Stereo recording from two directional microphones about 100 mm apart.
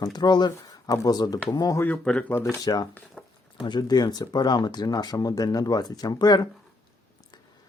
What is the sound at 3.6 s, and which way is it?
Speech, 50° left (ahead or behind).